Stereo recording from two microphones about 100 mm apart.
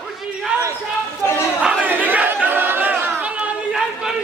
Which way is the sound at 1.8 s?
15° right (ahead or behind).